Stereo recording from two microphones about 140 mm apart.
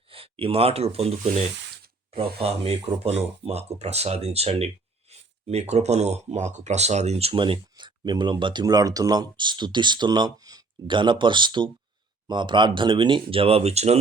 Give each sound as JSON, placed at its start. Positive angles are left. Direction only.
{"t": 0.1, "sound": "speech", "side_deg": -40}